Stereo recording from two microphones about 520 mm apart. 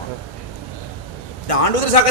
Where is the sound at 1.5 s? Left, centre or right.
Left.